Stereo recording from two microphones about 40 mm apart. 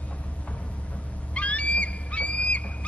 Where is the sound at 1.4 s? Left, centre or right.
Left.